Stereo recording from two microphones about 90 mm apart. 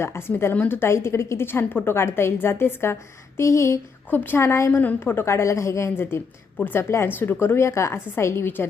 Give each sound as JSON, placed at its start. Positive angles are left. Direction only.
{"t": 0.0, "sound": "a woman's voice", "side_deg": 25}
{"t": 4.7, "sound": "a woman's voice", "side_deg": 20}